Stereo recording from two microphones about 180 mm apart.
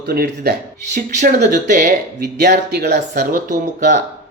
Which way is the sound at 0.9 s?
45° right (ahead or behind).